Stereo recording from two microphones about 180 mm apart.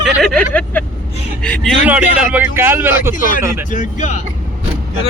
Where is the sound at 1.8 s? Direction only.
10° right (ahead or behind).